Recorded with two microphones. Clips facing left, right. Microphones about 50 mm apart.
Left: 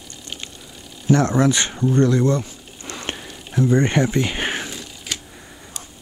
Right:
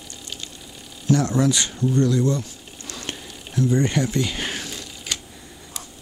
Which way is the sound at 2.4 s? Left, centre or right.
Left.